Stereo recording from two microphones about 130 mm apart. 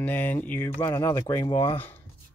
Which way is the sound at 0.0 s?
10° left (ahead or behind).